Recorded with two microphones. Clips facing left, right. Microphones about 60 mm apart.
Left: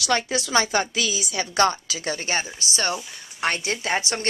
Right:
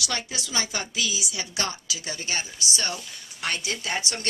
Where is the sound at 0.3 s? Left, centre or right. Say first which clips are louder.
Left 9 dB; left.